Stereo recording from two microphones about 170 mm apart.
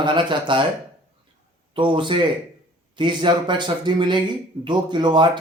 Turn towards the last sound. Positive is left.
turn(degrees=-25)  # may be behind; listen again after turning